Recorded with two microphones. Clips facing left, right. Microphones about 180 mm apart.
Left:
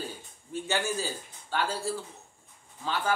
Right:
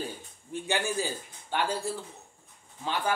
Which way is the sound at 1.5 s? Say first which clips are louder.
Right 1 dB; 15° right (ahead or behind).